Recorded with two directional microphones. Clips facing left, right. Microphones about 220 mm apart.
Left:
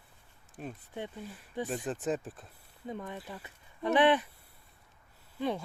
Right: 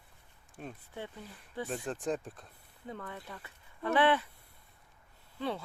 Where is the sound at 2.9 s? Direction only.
15° left (ahead or behind).